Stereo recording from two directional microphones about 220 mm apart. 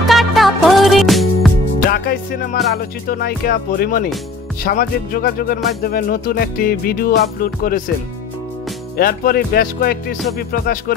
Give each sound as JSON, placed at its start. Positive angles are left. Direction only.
{"t": 0.0, "sound": "music", "side_deg": 0}
{"t": 1.9, "sound": "music", "side_deg": 45}
{"t": 8.9, "sound": "music", "side_deg": 45}